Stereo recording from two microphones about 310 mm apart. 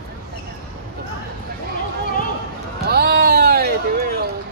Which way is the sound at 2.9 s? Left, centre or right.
Right.